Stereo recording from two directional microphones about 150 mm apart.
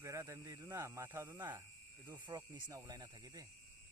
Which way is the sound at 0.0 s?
20° right (ahead or behind).